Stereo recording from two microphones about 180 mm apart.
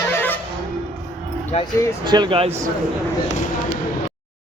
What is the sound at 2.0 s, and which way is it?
Speech, 25° right (ahead or behind).